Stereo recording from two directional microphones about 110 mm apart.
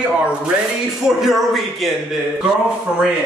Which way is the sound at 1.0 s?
5° right (ahead or behind).